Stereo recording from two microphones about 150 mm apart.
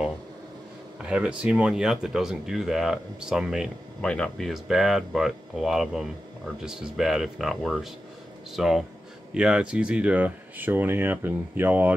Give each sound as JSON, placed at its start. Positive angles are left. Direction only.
{"t": 1.0, "sound": "speech", "side_deg": -5}